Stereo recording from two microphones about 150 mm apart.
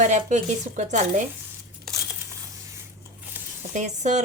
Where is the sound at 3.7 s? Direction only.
50° right (ahead or behind).